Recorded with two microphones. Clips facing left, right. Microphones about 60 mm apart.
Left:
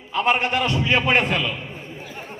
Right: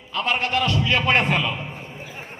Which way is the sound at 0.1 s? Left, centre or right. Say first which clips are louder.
Left 3 dB; left.